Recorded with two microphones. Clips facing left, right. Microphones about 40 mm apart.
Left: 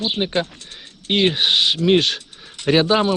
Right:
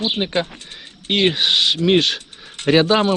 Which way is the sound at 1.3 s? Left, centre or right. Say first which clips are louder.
Even; right.